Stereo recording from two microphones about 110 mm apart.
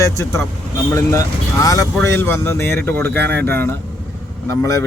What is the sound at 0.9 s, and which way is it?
Speech, 25° left (ahead or behind).